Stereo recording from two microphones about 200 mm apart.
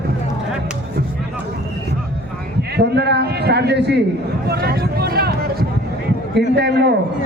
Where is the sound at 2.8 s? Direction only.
55° right (ahead or behind).